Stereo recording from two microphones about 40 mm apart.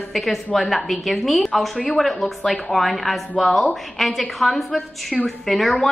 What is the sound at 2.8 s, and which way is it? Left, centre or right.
A woman's voice, centre.